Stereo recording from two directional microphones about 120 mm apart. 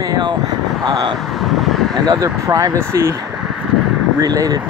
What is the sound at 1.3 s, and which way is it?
Vehicle, centre (ahead or behind).